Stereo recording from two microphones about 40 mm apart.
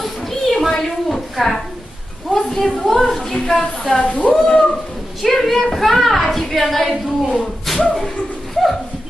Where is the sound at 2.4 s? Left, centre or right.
Centre.